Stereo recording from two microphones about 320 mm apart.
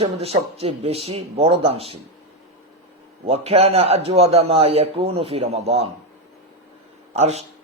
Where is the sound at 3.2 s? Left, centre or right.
Centre.